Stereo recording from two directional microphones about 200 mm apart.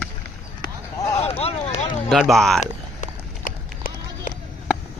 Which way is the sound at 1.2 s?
30° left (ahead or behind).